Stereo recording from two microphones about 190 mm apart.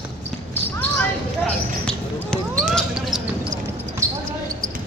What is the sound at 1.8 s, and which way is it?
Basketball bounce, 5° left (ahead or behind).